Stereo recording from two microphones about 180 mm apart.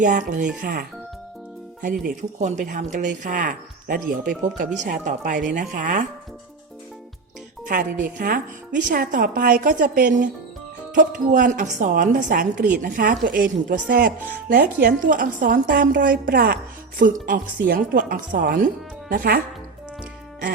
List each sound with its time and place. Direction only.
0.0 s speech: 45° right (ahead or behind)
7.7 s speech: 50° right (ahead or behind)